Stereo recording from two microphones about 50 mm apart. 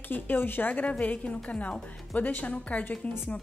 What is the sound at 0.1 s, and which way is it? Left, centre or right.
Speech, left.